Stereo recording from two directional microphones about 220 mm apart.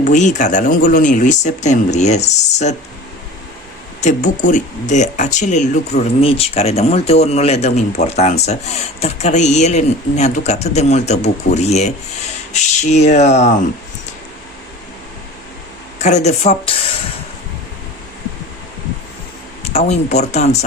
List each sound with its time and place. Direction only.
0.0 s speech: 35° left (ahead or behind)
4.0 s speech: 35° left (ahead or behind)
16.0 s speech: 30° left (ahead or behind)
19.6 s speech: 30° left (ahead or behind)